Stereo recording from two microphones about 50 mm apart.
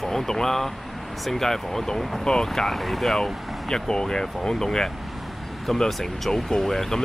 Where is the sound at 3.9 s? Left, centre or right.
Centre.